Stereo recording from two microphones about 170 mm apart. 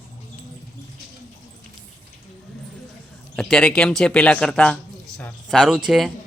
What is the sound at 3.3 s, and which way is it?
Speech, 5° left (ahead or behind).